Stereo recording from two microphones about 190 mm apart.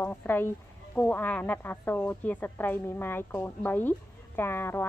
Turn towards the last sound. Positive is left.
turn(degrees=10)  # may be behind; listen again after turning